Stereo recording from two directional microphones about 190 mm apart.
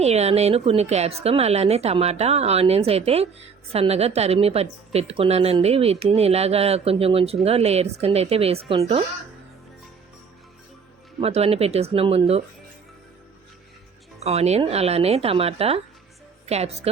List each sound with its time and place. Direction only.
0.0 s a woman's voice: 35° right (ahead or behind)
11.2 s a woman's voice: 30° right (ahead or behind)
14.3 s a woman's voice: 35° right (ahead or behind)